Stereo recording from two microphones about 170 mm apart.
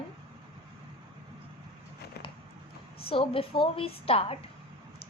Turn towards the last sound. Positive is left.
turn(degrees=35)  # may be behind; listen again after turning